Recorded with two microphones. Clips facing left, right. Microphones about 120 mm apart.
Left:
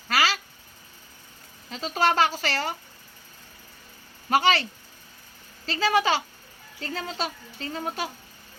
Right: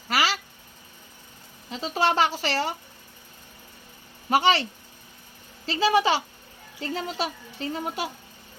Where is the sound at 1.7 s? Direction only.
20° right (ahead or behind).